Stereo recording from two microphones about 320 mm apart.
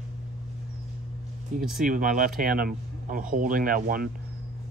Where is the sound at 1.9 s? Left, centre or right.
Right.